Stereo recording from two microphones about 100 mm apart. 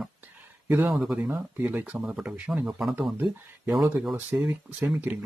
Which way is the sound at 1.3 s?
15° right (ahead or behind).